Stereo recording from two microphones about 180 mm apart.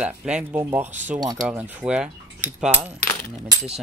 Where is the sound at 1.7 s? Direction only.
5° right (ahead or behind).